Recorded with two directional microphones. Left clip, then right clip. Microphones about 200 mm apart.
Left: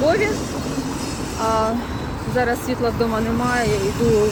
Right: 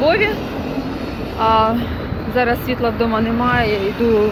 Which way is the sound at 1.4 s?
15° left (ahead or behind).